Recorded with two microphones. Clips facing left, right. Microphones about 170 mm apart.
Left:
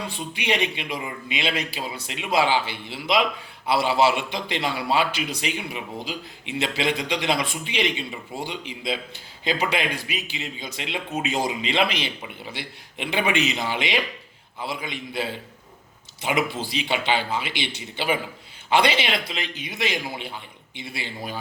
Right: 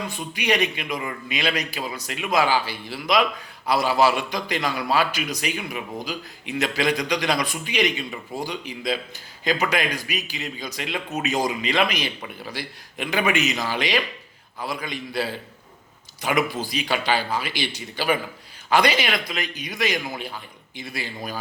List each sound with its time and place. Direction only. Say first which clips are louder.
0.0 s a man's voice: right 2 dB; 30° left (ahead or behind)